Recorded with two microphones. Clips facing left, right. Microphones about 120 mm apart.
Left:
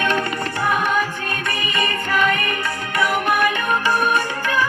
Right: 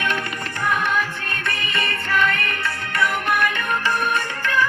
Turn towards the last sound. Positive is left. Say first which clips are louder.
# left 2 dB
turn(degrees=10)  # may be behind; listen again after turning